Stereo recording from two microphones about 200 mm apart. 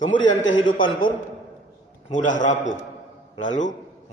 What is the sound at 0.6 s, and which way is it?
Speech, 25° left (ahead or behind).